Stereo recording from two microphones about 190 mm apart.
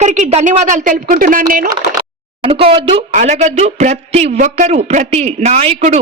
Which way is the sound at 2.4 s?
30° right (ahead or behind).